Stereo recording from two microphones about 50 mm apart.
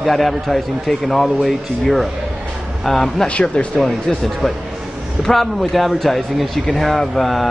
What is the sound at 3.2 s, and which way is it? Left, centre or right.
Speech, left.